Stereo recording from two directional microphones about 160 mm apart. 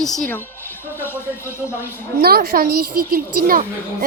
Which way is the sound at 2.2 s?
75° right (ahead or behind).